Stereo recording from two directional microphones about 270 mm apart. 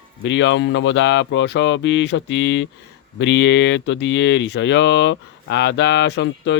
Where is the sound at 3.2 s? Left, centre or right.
Left.